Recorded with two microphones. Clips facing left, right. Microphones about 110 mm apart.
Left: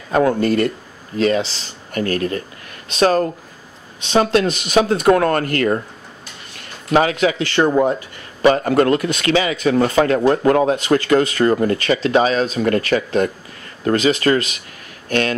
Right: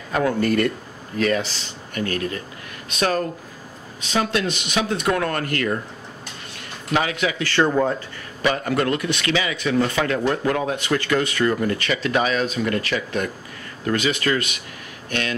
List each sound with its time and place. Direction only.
0.1 s speech: 35° left (ahead or behind)
2.0 s speech: 45° left (ahead or behind)
2.9 s a man's voice: 30° left (ahead or behind)
6.9 s a man's voice: 40° left (ahead or behind)
7.3 s speech: 20° left (ahead or behind)
8.4 s a man's voice: 35° left (ahead or behind)
12.6 s speech: 50° left (ahead or behind)
13.8 s a man's voice: 35° left (ahead or behind)
15.0 s speech: 45° left (ahead or behind)